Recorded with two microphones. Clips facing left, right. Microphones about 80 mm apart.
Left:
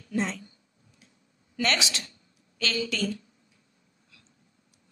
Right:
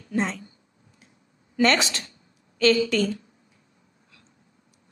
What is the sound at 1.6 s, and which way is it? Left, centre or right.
A woman's voice, right.